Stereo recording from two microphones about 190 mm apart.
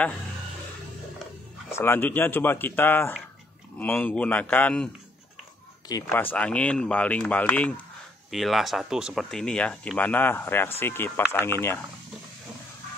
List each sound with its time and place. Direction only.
1.7 s speech: 15° left (ahead or behind)
5.9 s speech: 20° left (ahead or behind)
6.3 s speech: 5° left (ahead or behind)